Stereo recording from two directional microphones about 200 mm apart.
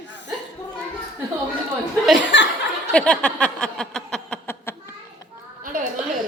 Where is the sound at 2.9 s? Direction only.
5° left (ahead or behind).